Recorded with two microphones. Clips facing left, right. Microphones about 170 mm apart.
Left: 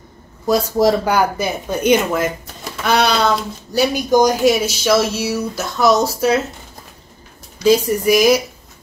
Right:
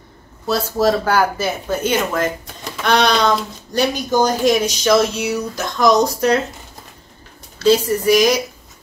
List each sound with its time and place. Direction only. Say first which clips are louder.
0.5 s speech: left 2 dB; 10° left (ahead or behind)
7.5 s speech: left 1 dB; 10° left (ahead or behind)